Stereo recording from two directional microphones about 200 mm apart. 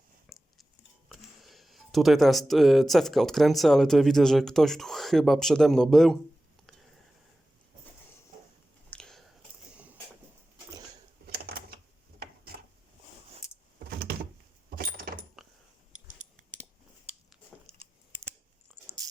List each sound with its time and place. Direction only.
0.3 s whispering: centre (ahead or behind)
1.1 s speech: centre (ahead or behind)
8.9 s biting: 5° left (ahead or behind)
9.7 s vehicle: 5° right (ahead or behind)
11.3 s a sound: 50° right (ahead or behind)
14.8 s a sound: 50° right (ahead or behind)
16.4 s scissors: 40° right (ahead or behind)